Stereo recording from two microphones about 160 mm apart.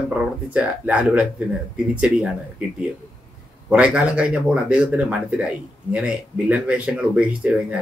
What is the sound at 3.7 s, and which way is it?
Speech, 5° right (ahead or behind).